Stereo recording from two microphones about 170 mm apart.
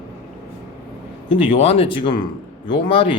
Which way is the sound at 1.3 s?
35° left (ahead or behind).